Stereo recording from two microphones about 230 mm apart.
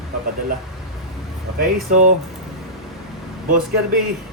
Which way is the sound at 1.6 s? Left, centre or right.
Right.